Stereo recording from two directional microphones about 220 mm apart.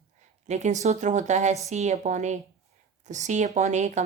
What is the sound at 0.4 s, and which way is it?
Speech, 30° right (ahead or behind).